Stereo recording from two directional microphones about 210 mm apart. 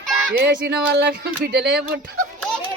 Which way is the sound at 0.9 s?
50° right (ahead or behind).